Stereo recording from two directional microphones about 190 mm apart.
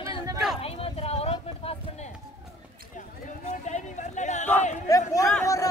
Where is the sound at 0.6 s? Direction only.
30° left (ahead or behind).